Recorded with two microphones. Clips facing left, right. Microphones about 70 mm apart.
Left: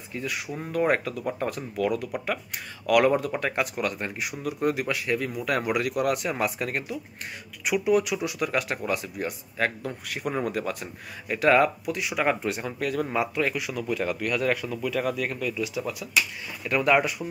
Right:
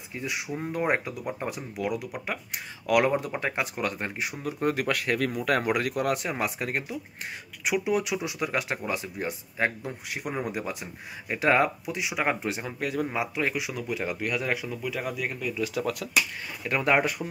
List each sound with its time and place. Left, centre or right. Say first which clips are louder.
0.1 s speech: left 1 dB; right
4.7 s speech: even; right; by 15.5 s centre
15.7 s speech: right 2 dB; right
16.6 s speech: left 2 dB; right